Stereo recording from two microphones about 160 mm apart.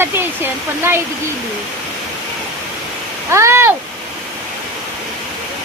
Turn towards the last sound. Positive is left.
turn(degrees=-15)  # may be behind; listen again after turning